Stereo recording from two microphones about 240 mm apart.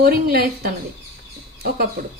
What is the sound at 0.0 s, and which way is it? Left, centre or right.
Speech, right.